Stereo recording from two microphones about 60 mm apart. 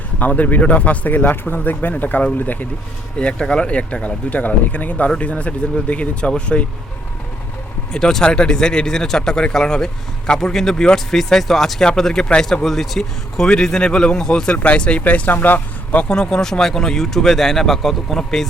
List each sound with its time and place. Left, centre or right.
0.2 s speech: left
3.2 s speech: centre
7.9 s speech: centre; by 16.0 s left
16.0 s speech: centre